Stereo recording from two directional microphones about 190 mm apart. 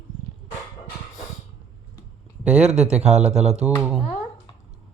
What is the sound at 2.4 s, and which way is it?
Speech, 5° right (ahead or behind).